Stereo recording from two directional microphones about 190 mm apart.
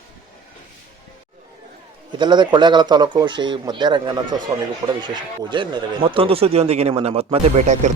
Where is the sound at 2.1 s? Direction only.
25° right (ahead or behind).